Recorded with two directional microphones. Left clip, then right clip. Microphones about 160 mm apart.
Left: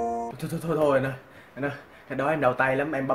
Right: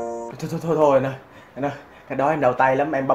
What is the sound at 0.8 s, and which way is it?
Speech, 15° left (ahead or behind).